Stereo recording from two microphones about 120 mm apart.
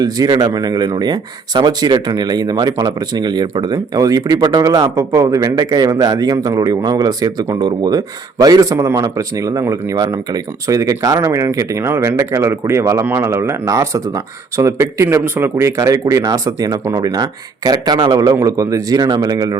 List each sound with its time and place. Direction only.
0.0 s speech: 30° right (ahead or behind)
4.4 s speech: 40° right (ahead or behind)
4.6 s a man's voice: 30° right (ahead or behind)